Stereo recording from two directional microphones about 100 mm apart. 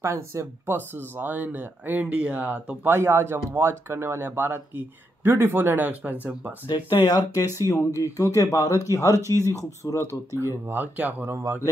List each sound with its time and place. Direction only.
0.0 s speech: 30° right (ahead or behind)
7.1 s speech: 45° left (ahead or behind)
7.6 s speech: 35° left (ahead or behind)
10.0 s speech: 30° right (ahead or behind)
10.7 s speech: 15° right (ahead or behind)